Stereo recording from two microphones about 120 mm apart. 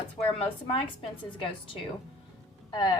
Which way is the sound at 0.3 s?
55° left (ahead or behind).